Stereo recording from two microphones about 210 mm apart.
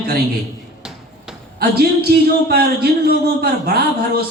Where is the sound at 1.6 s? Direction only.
45° right (ahead or behind).